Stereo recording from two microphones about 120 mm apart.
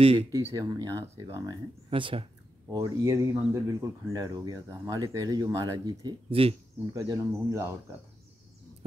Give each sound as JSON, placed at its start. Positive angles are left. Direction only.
{"t": 0.0, "sound": "speech", "side_deg": -50}
{"t": 0.3, "sound": "speech", "side_deg": -25}
{"t": 1.9, "sound": "speech", "side_deg": -45}
{"t": 2.7, "sound": "speech", "side_deg": -25}
{"t": 6.3, "sound": "speech", "side_deg": -50}
{"t": 6.9, "sound": "speech", "side_deg": -25}